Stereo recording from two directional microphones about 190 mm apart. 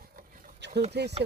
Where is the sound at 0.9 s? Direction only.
60° right (ahead or behind).